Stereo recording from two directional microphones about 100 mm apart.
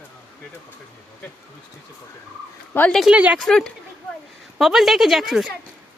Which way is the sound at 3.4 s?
5° left (ahead or behind).